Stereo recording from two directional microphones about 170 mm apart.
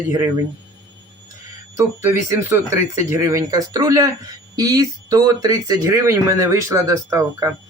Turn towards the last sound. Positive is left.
turn(degrees=-20)  # may be behind; listen again after turning